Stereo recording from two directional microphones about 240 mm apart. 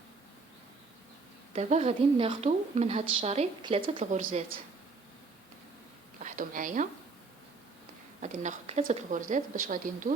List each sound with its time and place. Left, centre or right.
1.5 s a woman's voice: right
6.2 s a woman's voice: right
8.2 s speech: right